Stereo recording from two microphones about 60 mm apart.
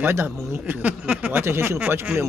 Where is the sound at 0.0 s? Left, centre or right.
Right.